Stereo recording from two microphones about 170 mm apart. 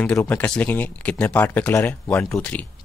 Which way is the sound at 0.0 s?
10° left (ahead or behind).